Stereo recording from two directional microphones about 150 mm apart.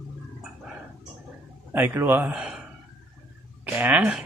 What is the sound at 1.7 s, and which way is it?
Speech, 15° right (ahead or behind).